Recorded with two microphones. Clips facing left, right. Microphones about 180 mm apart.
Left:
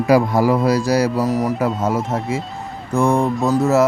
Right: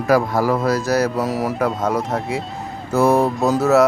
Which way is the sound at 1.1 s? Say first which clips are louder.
Left 2 dB; centre (ahead or behind).